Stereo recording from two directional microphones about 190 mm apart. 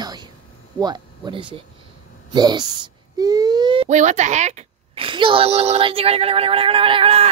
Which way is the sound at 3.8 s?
40° right (ahead or behind).